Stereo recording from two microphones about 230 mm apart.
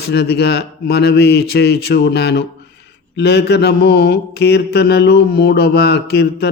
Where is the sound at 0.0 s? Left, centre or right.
Left.